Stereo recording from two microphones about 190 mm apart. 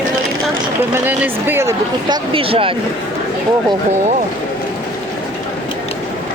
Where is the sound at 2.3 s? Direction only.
30° right (ahead or behind).